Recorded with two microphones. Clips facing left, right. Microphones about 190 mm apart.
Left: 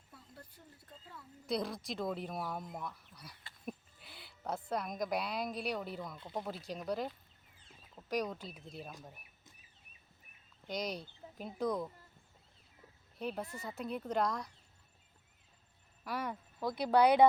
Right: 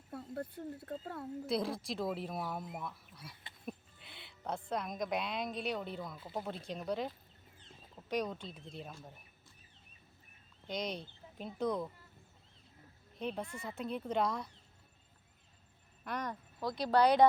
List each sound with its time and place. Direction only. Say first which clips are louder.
0.1 s speech: right 15 dB; 60° right (ahead or behind)
1.5 s speech: even; centre (ahead or behind)
10.7 s speech: even; centre (ahead or behind)
13.1 s speech: even; centre (ahead or behind)
16.0 s speech: left 1 dB; 5° left (ahead or behind)